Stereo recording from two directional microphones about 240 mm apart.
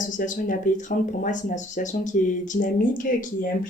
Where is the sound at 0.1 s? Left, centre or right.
Left.